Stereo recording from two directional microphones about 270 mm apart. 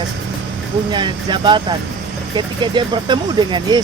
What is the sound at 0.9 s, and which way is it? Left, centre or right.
Speech, centre.